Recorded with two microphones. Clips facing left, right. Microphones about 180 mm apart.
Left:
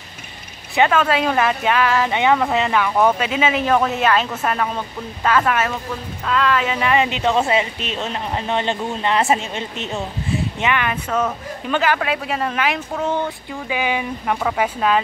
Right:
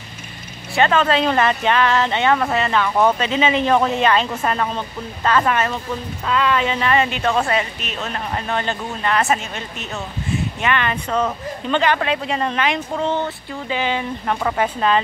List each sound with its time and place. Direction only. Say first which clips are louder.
0.7 s speech: even; 10° left (ahead or behind); by 10.4 s 30° left (ahead or behind)
10.6 s speech: right 1 dB; 10° left (ahead or behind)